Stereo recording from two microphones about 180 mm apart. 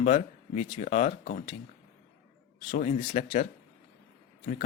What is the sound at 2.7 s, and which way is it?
Speech, 40° left (ahead or behind).